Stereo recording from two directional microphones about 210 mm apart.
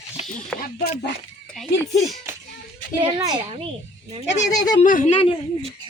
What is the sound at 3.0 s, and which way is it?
Speech, 20° right (ahead or behind).